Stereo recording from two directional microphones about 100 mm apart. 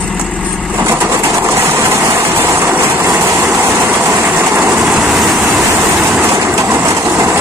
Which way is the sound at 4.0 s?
30° right (ahead or behind).